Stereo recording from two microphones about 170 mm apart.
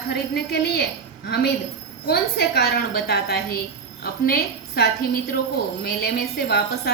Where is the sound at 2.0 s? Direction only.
65° left (ahead or behind).